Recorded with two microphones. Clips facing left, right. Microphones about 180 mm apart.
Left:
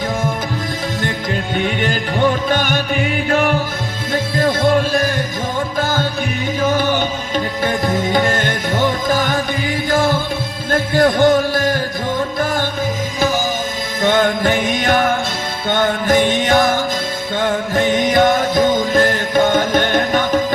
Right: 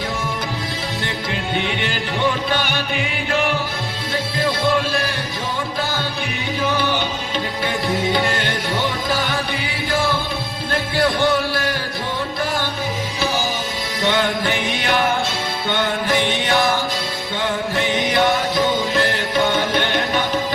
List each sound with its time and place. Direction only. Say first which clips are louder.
1.5 s music: left 5 dB; 45° left (ahead or behind)
6.6 s music: left 4 dB; 45° left (ahead or behind)
10.7 s music: left 6 dB; 45° left (ahead or behind)
14.0 s music: left 5 dB; 45° left (ahead or behind)